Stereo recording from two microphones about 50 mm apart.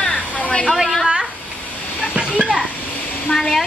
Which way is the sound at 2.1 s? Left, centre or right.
Centre.